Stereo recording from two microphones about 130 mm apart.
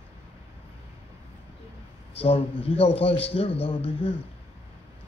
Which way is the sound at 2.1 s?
50° left (ahead or behind).